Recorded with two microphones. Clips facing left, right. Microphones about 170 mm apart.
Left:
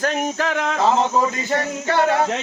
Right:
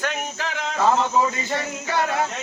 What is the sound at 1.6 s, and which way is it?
Music, 60° left (ahead or behind).